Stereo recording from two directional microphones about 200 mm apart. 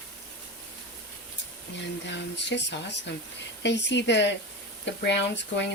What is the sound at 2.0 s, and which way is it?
Speech, 60° left (ahead or behind).